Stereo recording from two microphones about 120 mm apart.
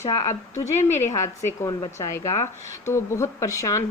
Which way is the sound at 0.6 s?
75° left (ahead or behind).